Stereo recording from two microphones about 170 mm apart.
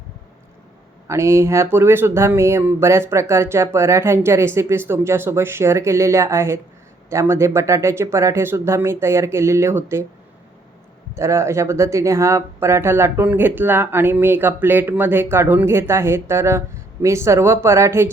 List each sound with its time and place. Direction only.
1.0 s speech: 15° right (ahead or behind)
11.1 s speech: 15° right (ahead or behind)